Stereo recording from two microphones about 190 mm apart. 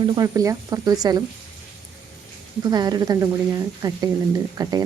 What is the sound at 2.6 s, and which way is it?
Speech, 20° right (ahead or behind).